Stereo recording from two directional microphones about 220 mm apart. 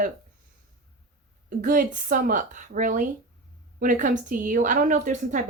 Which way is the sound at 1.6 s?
40° right (ahead or behind).